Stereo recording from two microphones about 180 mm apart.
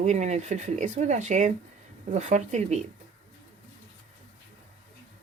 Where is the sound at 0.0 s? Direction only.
40° right (ahead or behind).